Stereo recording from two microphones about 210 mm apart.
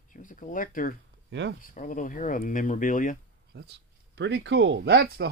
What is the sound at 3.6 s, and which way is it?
Speech, 55° right (ahead or behind).